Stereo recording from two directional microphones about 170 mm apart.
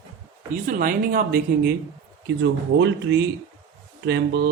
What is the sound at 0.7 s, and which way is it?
Speech, 55° right (ahead or behind).